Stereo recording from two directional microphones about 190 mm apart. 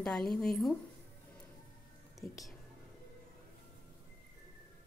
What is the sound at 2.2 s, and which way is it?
Speech, 50° left (ahead or behind).